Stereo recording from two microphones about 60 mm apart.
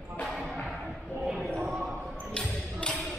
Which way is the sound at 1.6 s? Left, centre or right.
Centre.